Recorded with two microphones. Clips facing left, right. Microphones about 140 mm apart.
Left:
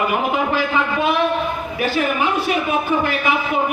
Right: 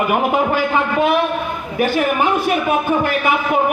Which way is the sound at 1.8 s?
50° right (ahead or behind).